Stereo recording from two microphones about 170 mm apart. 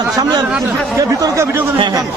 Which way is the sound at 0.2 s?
25° right (ahead or behind).